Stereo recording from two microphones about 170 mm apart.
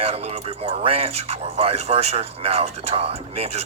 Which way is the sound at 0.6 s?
35° right (ahead or behind).